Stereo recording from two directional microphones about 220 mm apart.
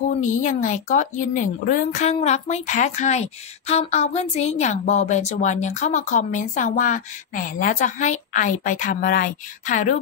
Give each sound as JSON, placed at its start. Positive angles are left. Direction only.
{"t": 0.2, "sound": "speech", "side_deg": 35}